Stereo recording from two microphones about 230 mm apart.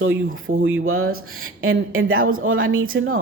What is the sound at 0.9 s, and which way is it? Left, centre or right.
Speech, right.